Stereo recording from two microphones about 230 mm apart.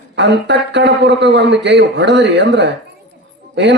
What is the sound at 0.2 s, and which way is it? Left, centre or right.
A man's voice, right.